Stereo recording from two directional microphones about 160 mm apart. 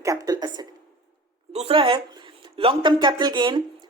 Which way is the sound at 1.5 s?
35° right (ahead or behind).